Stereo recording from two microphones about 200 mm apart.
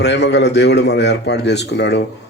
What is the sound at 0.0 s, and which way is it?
A man's voice, 60° left (ahead or behind).